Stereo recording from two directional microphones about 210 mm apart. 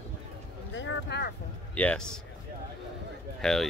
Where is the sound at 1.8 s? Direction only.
5° left (ahead or behind).